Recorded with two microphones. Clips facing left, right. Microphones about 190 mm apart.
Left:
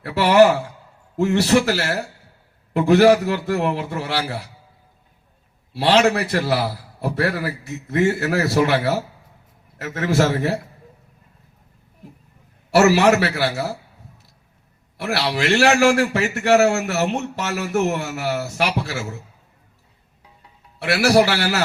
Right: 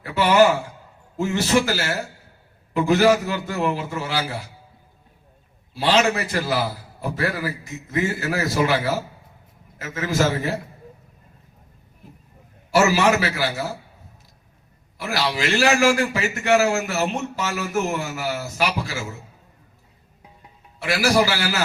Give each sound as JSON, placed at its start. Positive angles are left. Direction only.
{"t": 0.0, "sound": "a man's voice", "side_deg": 70}
{"t": 5.7, "sound": "a man's voice", "side_deg": 70}
{"t": 12.7, "sound": "a man's voice", "side_deg": 65}
{"t": 14.9, "sound": "a man's voice", "side_deg": 65}
{"t": 20.7, "sound": "a man's voice", "side_deg": 65}